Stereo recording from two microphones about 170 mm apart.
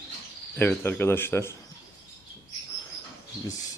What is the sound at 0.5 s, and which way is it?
Speech, 10° left (ahead or behind).